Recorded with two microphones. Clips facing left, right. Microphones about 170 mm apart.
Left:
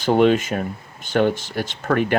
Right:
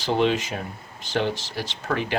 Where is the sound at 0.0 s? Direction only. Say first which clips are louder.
Left 6 dB; 50° left (ahead or behind).